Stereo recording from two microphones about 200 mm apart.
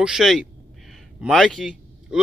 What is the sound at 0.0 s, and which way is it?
Speech, centre (ahead or behind).